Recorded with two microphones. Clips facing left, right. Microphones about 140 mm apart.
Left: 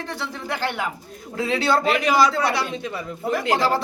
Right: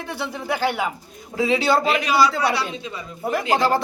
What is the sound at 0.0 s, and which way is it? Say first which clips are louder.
Speech: right 2 dB; 10° right (ahead or behind).